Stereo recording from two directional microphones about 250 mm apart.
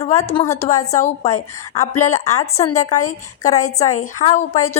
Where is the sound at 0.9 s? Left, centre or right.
Left.